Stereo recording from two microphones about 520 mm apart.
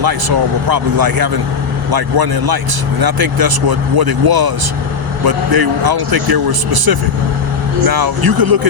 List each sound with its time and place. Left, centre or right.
0.0 s a man's voice: right